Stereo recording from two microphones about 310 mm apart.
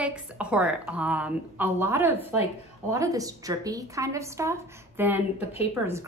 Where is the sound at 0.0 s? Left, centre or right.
Centre.